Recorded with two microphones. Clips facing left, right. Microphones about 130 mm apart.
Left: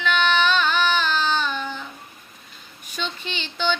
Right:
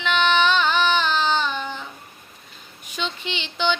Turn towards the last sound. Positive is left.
turn(degrees=-15)  # may be behind; listen again after turning